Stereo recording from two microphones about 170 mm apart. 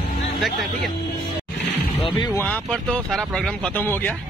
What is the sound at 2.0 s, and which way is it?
Speech, 30° left (ahead or behind).